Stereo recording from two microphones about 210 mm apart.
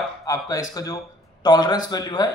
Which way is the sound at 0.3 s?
15° left (ahead or behind).